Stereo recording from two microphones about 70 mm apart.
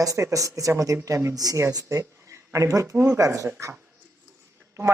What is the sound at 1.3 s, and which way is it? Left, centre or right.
Speech, right.